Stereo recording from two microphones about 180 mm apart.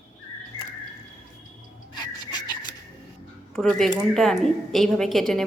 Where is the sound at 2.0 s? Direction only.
25° left (ahead or behind).